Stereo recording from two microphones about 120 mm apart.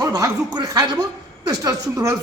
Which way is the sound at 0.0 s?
35° right (ahead or behind).